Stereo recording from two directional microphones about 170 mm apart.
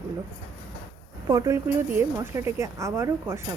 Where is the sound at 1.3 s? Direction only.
20° right (ahead or behind).